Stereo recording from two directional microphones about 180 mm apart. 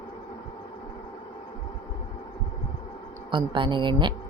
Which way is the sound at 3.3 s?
25° right (ahead or behind).